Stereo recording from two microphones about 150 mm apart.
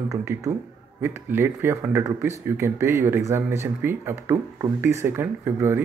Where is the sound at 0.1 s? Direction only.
20° right (ahead or behind).